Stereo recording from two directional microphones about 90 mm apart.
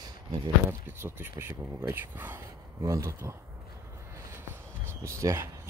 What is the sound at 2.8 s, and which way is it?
Speech, 35° right (ahead or behind).